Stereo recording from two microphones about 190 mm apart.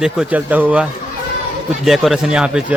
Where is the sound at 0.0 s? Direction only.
5° right (ahead or behind).